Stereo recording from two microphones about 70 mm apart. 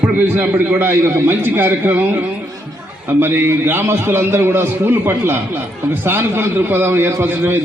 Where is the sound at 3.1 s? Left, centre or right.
Right.